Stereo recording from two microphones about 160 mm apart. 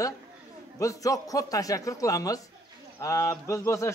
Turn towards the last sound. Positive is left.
turn(degrees=20)  # may be behind; listen again after turning